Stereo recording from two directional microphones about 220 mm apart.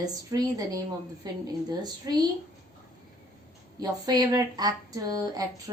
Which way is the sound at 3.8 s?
20° right (ahead or behind).